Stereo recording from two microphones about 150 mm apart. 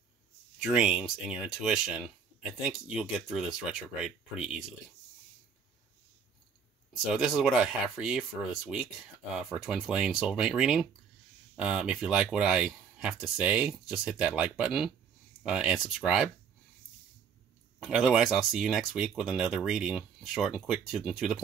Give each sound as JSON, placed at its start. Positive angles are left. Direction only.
{"t": 0.7, "sound": "speech", "side_deg": -5}
{"t": 7.2, "sound": "speech", "side_deg": -5}
{"t": 17.7, "sound": "speech", "side_deg": -5}